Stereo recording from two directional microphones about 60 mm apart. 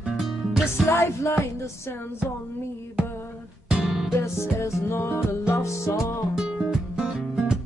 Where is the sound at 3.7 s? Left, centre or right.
Centre.